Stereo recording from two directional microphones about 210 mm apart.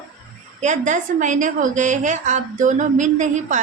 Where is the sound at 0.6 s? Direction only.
35° right (ahead or behind).